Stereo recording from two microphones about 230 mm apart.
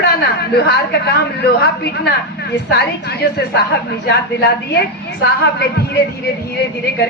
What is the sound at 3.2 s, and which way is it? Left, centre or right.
Speech, left.